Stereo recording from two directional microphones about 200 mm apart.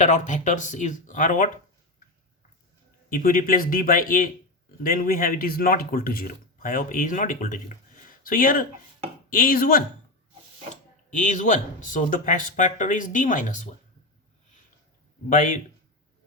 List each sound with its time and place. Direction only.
0.0 s speech: 35° left (ahead or behind)
3.1 s speech: 45° left (ahead or behind)
8.0 s a sound: 45° left (ahead or behind)
9.3 s speech: 45° left (ahead or behind)
11.1 s speech: 40° left (ahead or behind)
15.3 s speech: 40° left (ahead or behind)